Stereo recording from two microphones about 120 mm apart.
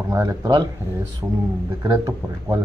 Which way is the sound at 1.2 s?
10° right (ahead or behind).